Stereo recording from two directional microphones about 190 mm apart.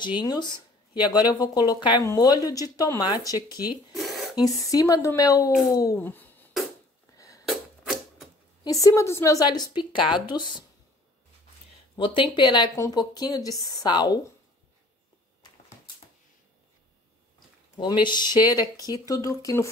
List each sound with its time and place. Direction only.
0.2 s speech: 20° left (ahead or behind)
3.6 s a sound: centre (ahead or behind)
4.4 s a woman's voice: 20° left (ahead or behind)
5.5 s speech: centre (ahead or behind)
5.8 s a woman's voice: 15° left (ahead or behind)
7.4 s typewriter: centre (ahead or behind)
8.6 s a woman's voice: 15° left (ahead or behind)
10.0 s speech: 5° right (ahead or behind)
12.0 s speech: 25° left (ahead or behind)
17.7 s speech: 25° left (ahead or behind)